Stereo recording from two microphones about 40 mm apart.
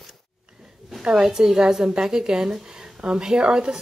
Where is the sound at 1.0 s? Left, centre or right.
Centre.